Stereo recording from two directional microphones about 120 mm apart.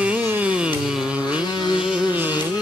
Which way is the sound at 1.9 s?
15° right (ahead or behind).